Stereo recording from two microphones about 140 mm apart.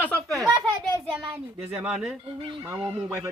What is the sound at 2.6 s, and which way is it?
Speech, 20° right (ahead or behind).